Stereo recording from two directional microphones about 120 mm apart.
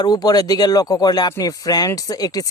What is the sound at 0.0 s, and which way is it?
Speech, 35° left (ahead or behind).